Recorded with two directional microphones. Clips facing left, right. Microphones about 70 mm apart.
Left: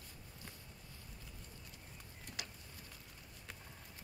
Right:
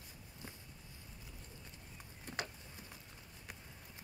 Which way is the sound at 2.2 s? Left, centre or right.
Right.